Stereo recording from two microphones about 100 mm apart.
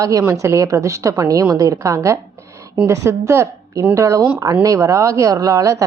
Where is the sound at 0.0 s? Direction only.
30° right (ahead or behind).